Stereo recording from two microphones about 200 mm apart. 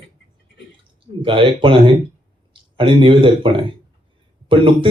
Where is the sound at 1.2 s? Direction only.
25° right (ahead or behind).